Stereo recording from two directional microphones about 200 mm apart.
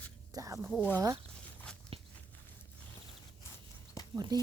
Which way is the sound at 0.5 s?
Centre (ahead or behind).